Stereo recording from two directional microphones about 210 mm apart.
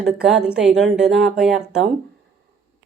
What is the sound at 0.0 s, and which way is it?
Speech, 5° right (ahead or behind).